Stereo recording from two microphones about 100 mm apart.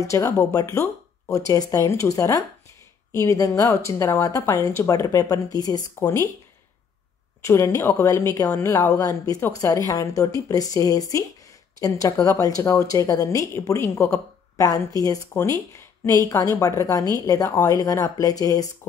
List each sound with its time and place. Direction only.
0.0 s speech: 30° left (ahead or behind)
5.9 s speech: 25° left (ahead or behind)
7.4 s speech: 30° left (ahead or behind)
8.5 s speech: 25° left (ahead or behind)
8.9 s speech: 35° left (ahead or behind)